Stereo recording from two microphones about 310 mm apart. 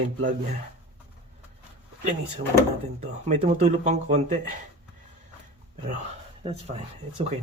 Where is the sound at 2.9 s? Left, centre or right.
Right.